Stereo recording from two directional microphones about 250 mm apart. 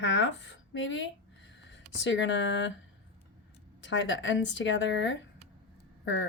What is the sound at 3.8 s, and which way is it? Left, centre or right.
Speech, left.